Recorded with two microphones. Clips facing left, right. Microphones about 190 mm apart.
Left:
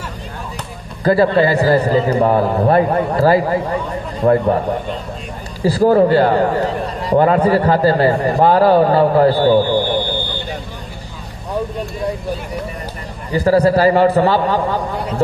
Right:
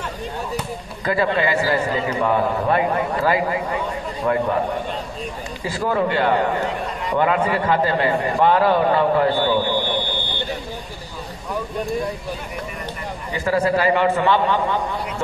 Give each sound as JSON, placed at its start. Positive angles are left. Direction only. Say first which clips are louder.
{"t": 1.0, "sound": "a man's voice", "louder": "left 7 dB", "side_deg": 40}
{"t": 5.6, "sound": "a man's voice", "louder": "left 10 dB", "side_deg": 40}
{"t": 13.3, "sound": "a man's voice", "louder": "left 7 dB", "side_deg": 35}